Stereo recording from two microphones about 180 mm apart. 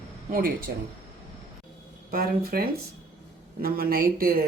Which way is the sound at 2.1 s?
55° right (ahead or behind).